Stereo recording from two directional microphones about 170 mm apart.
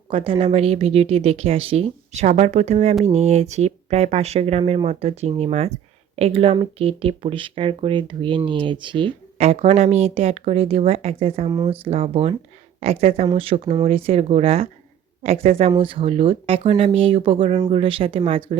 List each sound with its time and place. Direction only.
0.1 s speech: 35° right (ahead or behind)